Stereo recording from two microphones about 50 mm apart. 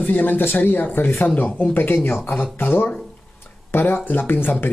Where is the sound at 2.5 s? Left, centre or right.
Left.